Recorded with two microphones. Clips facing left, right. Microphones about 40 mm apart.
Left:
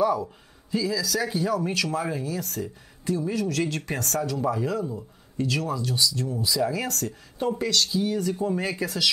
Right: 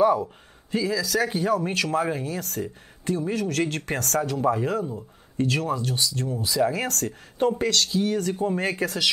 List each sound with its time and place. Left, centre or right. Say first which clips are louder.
0.0 s speech: right 3 dB; right